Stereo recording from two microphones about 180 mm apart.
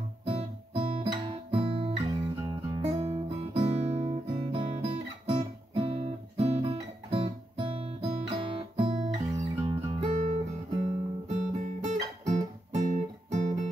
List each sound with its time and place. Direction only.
0.2 s guitar: 30° right (ahead or behind)
2.0 s music: 25° right (ahead or behind)
4.3 s guitar: 30° right (ahead or behind)
13.3 s music: 45° right (ahead or behind)